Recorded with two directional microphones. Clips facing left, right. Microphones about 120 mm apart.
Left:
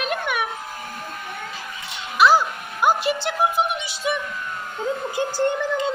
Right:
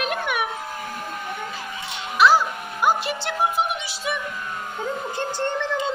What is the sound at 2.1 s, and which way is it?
Music, centre (ahead or behind).